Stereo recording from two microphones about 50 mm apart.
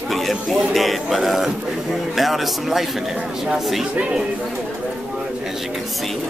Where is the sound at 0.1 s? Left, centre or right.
Centre.